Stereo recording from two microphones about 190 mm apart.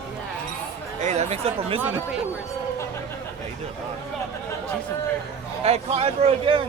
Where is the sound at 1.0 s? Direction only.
35° right (ahead or behind).